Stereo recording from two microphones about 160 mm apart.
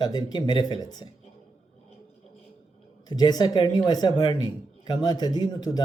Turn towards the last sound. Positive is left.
turn(degrees=25)  # may be behind; listen again after turning